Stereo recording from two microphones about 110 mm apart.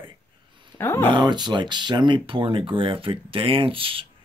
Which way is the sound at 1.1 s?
40° right (ahead or behind).